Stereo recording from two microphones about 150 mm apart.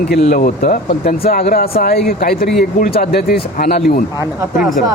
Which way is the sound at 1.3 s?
80° left.